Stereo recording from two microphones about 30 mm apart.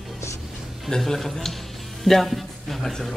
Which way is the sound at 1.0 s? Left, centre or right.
Centre.